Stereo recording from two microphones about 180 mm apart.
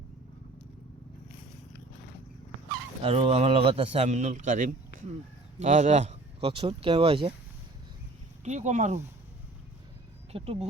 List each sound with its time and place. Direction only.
3.0 s speech: 30° right (ahead or behind)
8.4 s speech: 40° right (ahead or behind)
10.3 s speech: 35° right (ahead or behind)